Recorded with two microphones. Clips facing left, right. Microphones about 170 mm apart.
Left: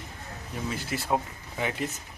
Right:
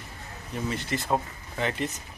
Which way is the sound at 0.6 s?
Centre (ahead or behind).